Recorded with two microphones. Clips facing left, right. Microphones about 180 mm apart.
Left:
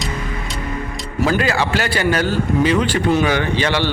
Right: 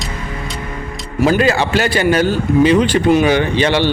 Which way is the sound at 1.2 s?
25° right (ahead or behind).